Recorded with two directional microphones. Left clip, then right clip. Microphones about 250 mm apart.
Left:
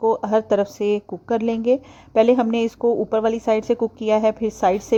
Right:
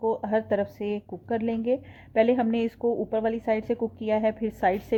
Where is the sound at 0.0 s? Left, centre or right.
Left.